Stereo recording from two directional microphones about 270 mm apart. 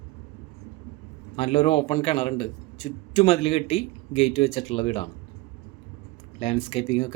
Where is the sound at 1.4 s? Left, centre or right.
Left.